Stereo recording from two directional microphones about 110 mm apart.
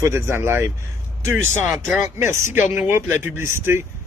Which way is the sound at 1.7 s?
Centre (ahead or behind).